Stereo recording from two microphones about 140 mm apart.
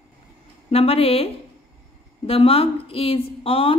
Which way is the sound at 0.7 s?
45° left (ahead or behind).